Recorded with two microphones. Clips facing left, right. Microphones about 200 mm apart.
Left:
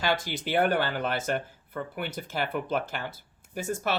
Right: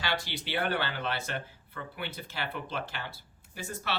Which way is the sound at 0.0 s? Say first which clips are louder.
Left 6 dB; 45° left (ahead or behind).